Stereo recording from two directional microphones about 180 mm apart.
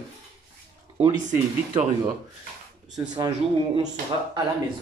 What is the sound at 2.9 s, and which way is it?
Speech, 20° right (ahead or behind).